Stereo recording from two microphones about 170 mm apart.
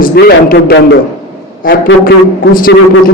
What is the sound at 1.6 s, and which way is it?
A man's voice, 60° left (ahead or behind).